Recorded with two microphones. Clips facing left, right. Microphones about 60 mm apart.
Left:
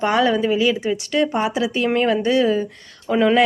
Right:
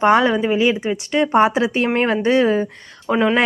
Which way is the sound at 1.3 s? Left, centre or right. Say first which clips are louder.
Right 5 dB; right.